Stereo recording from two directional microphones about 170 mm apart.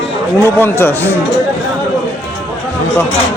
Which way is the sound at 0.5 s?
15° left (ahead or behind).